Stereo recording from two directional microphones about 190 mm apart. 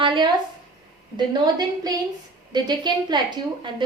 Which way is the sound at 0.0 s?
25° right (ahead or behind).